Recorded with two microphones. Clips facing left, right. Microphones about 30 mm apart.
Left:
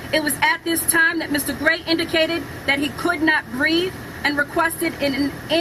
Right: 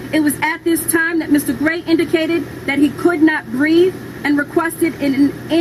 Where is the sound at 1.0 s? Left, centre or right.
Left.